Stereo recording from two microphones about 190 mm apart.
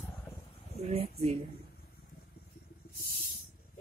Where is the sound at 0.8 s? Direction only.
35° right (ahead or behind).